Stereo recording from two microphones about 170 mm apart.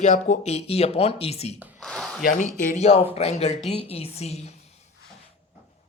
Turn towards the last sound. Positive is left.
turn(degrees=40)  # may be behind; listen again after turning